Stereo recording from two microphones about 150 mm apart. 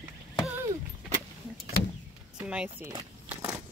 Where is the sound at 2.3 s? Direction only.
5° right (ahead or behind).